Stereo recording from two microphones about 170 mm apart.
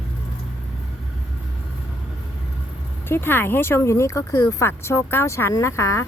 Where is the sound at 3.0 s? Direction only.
15° left (ahead or behind).